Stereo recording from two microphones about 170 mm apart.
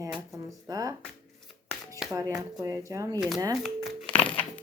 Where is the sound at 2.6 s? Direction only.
20° right (ahead or behind).